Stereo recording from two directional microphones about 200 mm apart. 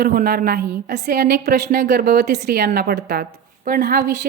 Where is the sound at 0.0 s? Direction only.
50° right (ahead or behind).